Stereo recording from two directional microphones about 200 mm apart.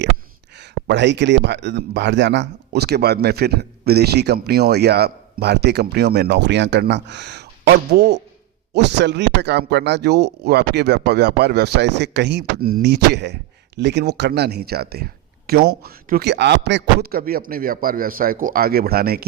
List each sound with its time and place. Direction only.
0.9 s speech: 60° right (ahead or behind)